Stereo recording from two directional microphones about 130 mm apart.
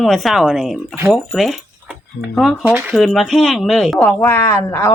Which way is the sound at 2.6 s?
15° right (ahead or behind).